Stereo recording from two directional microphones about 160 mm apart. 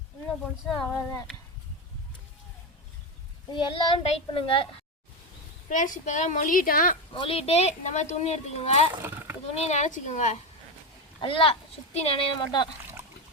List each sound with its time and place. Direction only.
0.9 s speech: 15° left (ahead or behind)
3.5 s speech: 30° left (ahead or behind)
5.6 s a woman's voice: 55° left (ahead or behind)
7.1 s speech: 35° left (ahead or behind)
9.0 s speech: 10° right (ahead or behind)
9.6 s a woman's voice: 45° left (ahead or behind)
11.2 s speech: 30° left (ahead or behind)